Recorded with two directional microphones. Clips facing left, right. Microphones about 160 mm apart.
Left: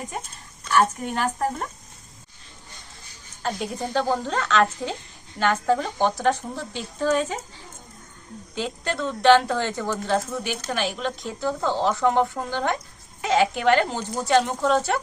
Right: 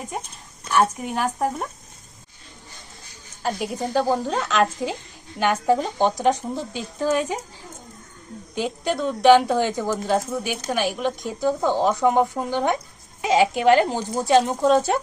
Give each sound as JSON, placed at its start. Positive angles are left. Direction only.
{"t": 0.7, "sound": "speech", "side_deg": -10}
{"t": 3.4, "sound": "speech", "side_deg": -5}
{"t": 8.5, "sound": "speech", "side_deg": -15}